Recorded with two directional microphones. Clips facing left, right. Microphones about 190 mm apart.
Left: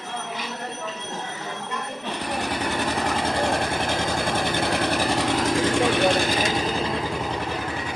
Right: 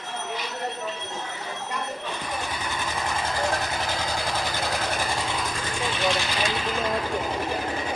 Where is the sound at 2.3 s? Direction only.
65° left (ahead or behind); by 5.7 s 85° left.